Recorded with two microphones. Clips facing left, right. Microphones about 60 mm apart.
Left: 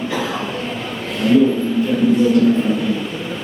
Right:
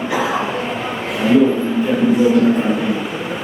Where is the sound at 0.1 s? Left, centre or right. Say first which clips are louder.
Right 7 dB; centre.